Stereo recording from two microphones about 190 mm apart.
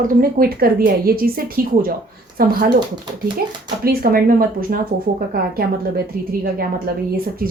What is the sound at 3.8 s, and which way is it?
A woman's voice, 50° right (ahead or behind).